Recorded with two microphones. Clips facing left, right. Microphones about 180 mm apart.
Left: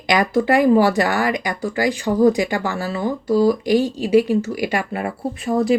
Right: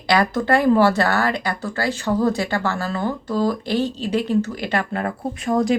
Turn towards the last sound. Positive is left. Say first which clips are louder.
# left 1 dB
turn(degrees=5)  # may be behind; listen again after turning